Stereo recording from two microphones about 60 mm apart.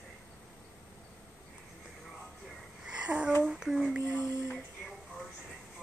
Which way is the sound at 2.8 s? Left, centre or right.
Centre.